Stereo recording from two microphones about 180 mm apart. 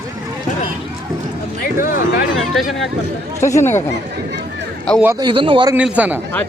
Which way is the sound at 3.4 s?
15° left (ahead or behind).